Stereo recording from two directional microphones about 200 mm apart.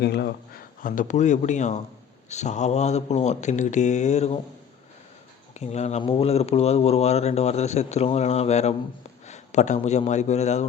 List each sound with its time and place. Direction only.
0.0 s speech: 55° left (ahead or behind); by 4.4 s 35° left (ahead or behind)
5.5 s a man's voice: 35° left (ahead or behind)